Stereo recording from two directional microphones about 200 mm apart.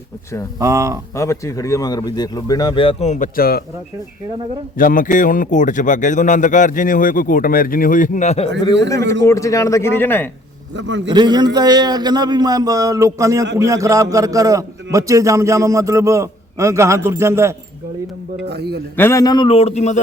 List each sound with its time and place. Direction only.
0.6 s a man's voice: 15° right (ahead or behind)
1.1 s speech: 15° left (ahead or behind); by 3.6 s 50° left (ahead or behind)
4.8 s speech: 45° left (ahead or behind)
9.2 s speech: 15° left (ahead or behind)
10.8 s a man's voice: 65° right (ahead or behind)
11.1 s a man's voice: 20° right (ahead or behind)
18.4 s a man's voice: 55° right (ahead or behind)
18.9 s speech: 15° left (ahead or behind); by 20.0 s 35° left (ahead or behind)